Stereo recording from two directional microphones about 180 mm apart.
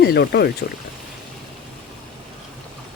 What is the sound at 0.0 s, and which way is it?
Speech, 60° left (ahead or behind).